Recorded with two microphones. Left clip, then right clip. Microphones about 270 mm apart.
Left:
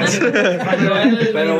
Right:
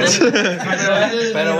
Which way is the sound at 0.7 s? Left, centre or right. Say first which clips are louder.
Right 3 dB; centre.